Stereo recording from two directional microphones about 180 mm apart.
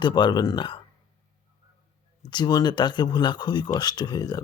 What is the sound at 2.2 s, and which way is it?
Speech, 25° left (ahead or behind).